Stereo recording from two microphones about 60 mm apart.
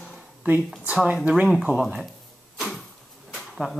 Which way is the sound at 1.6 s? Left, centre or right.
Centre.